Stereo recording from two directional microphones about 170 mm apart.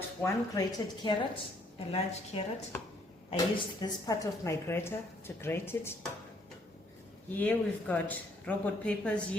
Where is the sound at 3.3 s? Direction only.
25° left (ahead or behind).